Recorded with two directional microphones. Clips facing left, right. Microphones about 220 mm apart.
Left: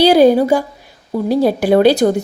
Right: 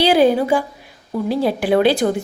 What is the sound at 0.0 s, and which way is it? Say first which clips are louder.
A woman's voice: left 5 dB; 40° left (ahead or behind).